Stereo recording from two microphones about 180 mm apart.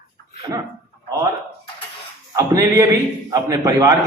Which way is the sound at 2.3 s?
20° right (ahead or behind).